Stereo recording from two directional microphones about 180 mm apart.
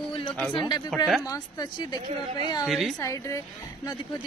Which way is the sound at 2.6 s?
Centre (ahead or behind).